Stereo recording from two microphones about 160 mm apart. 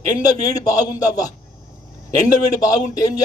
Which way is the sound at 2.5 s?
20° left (ahead or behind).